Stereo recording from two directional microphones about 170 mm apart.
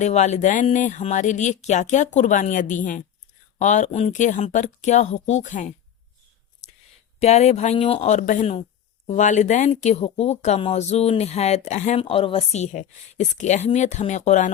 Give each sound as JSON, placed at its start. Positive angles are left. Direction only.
{"t": 0.0, "sound": "speech", "side_deg": 40}
{"t": 7.2, "sound": "speech", "side_deg": 40}